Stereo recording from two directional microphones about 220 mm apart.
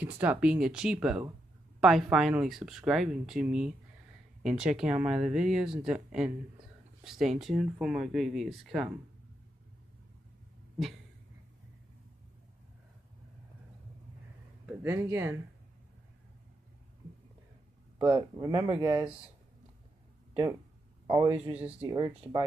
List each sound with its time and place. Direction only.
0.0 s speech: 5° right (ahead or behind)
14.8 s speech: 10° right (ahead or behind)
18.1 s speech: 20° right (ahead or behind)
21.1 s speech: 20° right (ahead or behind)
21.5 s speech: 5° right (ahead or behind)
21.8 s speech: 20° right (ahead or behind)